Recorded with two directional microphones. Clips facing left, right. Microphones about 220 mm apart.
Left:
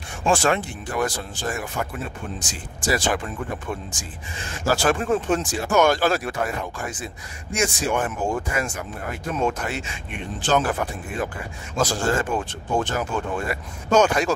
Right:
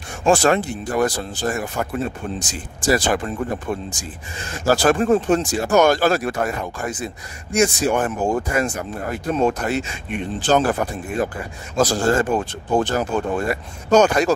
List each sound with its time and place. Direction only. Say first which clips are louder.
0.3 s speech: right 5 dB; 40° right (ahead or behind)